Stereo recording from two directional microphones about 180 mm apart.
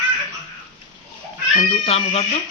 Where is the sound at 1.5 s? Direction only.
35° left (ahead or behind).